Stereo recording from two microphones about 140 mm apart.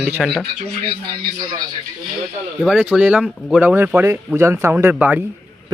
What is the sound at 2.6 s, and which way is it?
Speech, 5° right (ahead or behind).